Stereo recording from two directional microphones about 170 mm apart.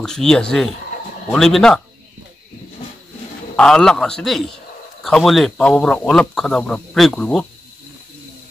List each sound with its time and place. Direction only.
0.0 s speech: 5° left (ahead or behind)
3.5 s speech: 5° left (ahead or behind)